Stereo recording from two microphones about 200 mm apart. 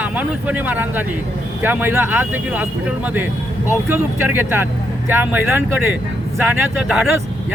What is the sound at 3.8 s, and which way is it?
Speech, 10° right (ahead or behind).